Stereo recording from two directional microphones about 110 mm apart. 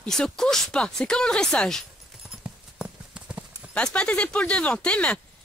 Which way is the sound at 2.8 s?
10° right (ahead or behind).